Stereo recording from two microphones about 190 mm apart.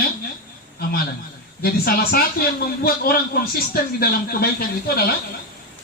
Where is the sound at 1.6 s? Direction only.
50° left (ahead or behind).